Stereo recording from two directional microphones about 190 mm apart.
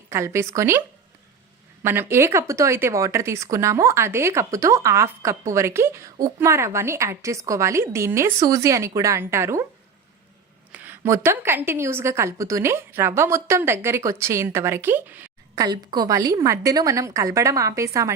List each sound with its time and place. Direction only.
0.1 s a woman's voice: 15° right (ahead or behind)
10.7 s a woman's voice: 10° right (ahead or behind)